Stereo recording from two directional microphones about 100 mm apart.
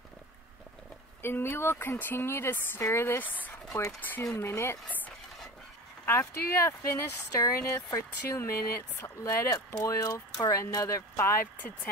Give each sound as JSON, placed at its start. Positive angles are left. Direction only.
{"t": 1.2, "sound": "speech", "side_deg": 25}
{"t": 3.7, "sound": "speech", "side_deg": 15}
{"t": 4.4, "sound": "speech", "side_deg": 25}